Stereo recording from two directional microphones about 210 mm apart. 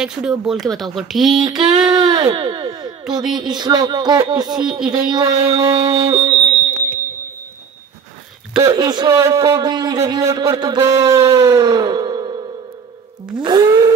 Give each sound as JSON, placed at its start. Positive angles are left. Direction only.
{"t": 0.0, "sound": "speech", "side_deg": -5}
{"t": 1.3, "sound": "speech", "side_deg": -20}
{"t": 8.5, "sound": "speech", "side_deg": -20}